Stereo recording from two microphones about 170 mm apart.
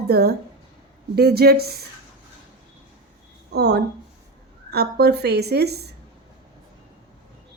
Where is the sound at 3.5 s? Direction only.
75° right (ahead or behind).